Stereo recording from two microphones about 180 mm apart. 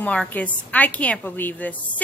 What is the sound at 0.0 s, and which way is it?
A woman's voice, 5° left (ahead or behind).